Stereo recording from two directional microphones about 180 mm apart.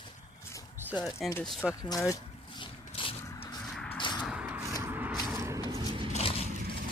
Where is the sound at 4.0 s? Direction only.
25° left (ahead or behind).